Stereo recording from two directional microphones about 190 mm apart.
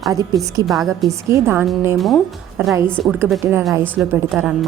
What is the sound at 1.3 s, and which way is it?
A woman's voice, 10° right (ahead or behind).